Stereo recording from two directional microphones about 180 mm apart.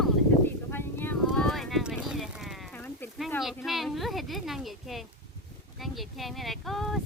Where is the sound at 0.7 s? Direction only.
10° left (ahead or behind).